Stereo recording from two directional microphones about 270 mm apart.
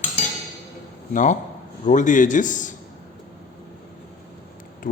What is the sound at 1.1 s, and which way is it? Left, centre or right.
A man's voice, left.